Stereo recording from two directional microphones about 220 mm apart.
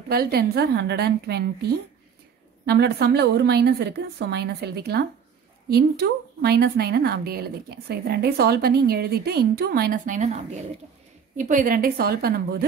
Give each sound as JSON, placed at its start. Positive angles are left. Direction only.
{"t": 0.1, "sound": "a woman's voice", "side_deg": -45}